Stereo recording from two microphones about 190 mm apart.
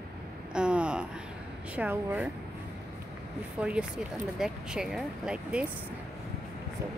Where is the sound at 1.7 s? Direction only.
10° right (ahead or behind).